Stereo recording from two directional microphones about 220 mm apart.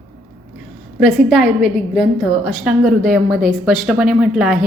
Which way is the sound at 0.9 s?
Centre (ahead or behind).